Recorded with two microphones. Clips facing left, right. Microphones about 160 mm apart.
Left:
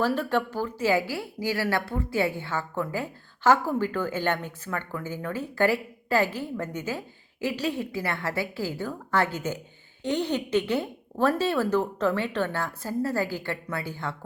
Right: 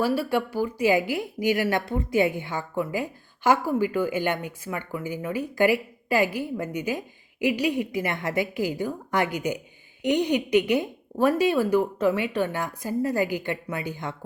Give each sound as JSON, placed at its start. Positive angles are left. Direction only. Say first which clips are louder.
{"t": 0.0, "sound": "speech", "louder": "right 1 dB", "side_deg": -10}